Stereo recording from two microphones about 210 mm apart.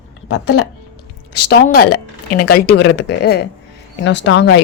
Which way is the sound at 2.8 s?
60° left (ahead or behind).